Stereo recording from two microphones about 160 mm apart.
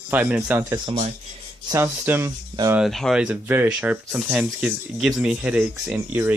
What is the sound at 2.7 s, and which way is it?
Speech, 5° right (ahead or behind).